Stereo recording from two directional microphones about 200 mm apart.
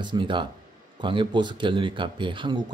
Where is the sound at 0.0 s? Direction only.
25° right (ahead or behind).